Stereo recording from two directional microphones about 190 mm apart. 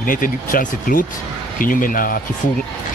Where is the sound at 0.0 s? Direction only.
45° left (ahead or behind).